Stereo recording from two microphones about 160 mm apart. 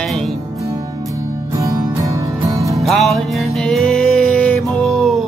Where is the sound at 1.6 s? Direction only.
20° right (ahead or behind).